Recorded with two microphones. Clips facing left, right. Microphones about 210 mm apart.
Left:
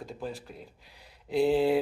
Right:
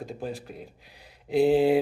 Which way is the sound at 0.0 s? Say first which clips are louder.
Right 3 dB; 15° right (ahead or behind).